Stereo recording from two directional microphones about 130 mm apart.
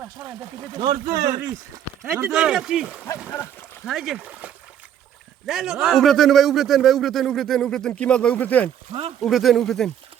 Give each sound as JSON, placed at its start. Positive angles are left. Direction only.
{"t": 0.3, "sound": "speech", "side_deg": -30}
{"t": 2.0, "sound": "a man's voice", "side_deg": -10}
{"t": 3.2, "sound": "speech", "side_deg": 20}
{"t": 3.8, "sound": "a man's voice", "side_deg": -5}
{"t": 8.9, "sound": "speech", "side_deg": -50}
{"t": 9.2, "sound": "a man's voice", "side_deg": 0}